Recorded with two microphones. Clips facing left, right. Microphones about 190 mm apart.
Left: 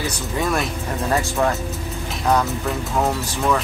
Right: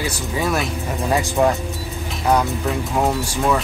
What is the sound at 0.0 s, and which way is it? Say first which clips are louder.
Speech: right 1 dB; 5° right (ahead or behind).